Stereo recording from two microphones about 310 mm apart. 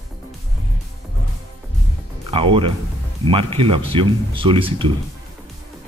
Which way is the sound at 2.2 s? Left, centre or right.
Centre.